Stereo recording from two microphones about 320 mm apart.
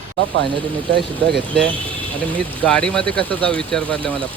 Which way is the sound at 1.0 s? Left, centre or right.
Centre.